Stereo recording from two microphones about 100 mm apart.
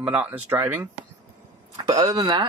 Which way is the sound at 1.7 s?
55° right (ahead or behind).